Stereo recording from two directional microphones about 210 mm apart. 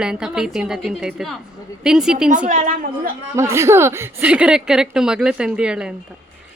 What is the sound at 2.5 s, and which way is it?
Speech, 40° right (ahead or behind).